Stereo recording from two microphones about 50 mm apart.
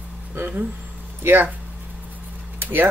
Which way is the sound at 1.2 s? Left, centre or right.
Right.